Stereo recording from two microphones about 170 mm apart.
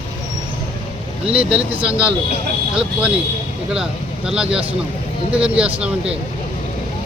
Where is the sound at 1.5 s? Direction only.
5° right (ahead or behind).